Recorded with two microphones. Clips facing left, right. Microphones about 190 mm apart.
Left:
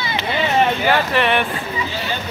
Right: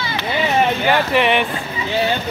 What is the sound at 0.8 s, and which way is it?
Speech, 15° right (ahead or behind).